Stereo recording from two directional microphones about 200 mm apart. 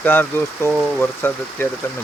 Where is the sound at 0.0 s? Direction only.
10° left (ahead or behind).